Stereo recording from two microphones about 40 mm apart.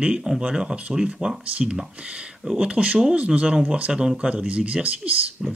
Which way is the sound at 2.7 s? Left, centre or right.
Right.